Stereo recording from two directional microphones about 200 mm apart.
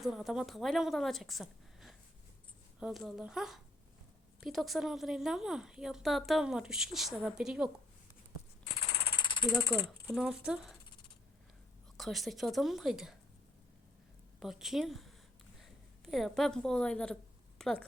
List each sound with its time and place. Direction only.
0.0 s a woman's voice: centre (ahead or behind)
9.1 s a sound: 25° left (ahead or behind)
10.1 s a woman's voice: centre (ahead or behind)
11.9 s a woman's voice: centre (ahead or behind)
14.3 s a woman's voice: centre (ahead or behind)